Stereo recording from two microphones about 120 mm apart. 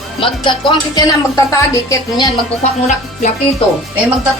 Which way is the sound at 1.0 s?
25° left (ahead or behind).